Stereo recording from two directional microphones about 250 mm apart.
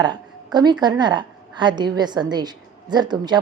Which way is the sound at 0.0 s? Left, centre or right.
Centre.